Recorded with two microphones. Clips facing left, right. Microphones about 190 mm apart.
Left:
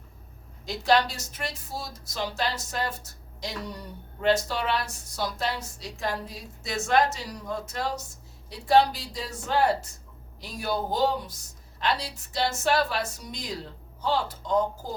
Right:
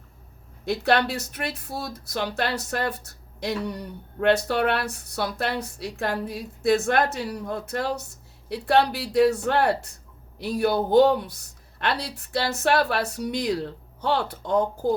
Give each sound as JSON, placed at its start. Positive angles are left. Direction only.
{"t": 0.6, "sound": "speech", "side_deg": -60}